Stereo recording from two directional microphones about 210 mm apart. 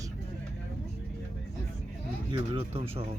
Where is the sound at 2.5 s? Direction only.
30° right (ahead or behind).